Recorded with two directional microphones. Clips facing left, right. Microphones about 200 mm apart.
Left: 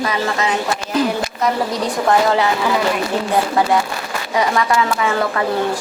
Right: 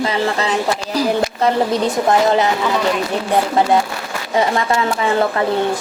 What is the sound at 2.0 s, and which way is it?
Speech, 20° right (ahead or behind).